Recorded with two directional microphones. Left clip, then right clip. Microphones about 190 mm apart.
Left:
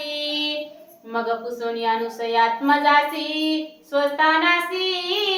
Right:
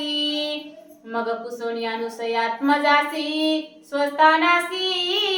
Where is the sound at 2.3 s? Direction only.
15° right (ahead or behind).